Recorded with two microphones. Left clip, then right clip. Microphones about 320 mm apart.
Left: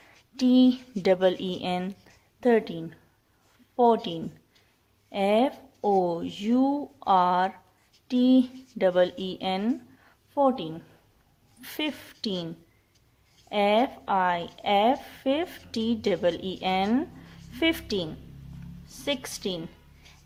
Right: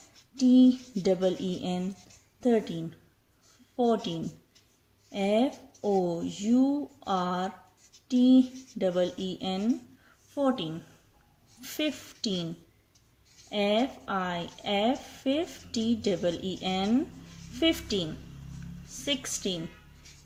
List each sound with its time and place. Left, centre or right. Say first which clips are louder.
0.3 s speech: even; left
3.8 s speech: left 5 dB; left
13.5 s a woman's voice: left 4 dB; left